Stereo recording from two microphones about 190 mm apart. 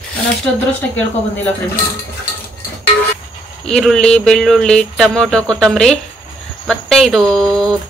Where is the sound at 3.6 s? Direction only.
Centre (ahead or behind).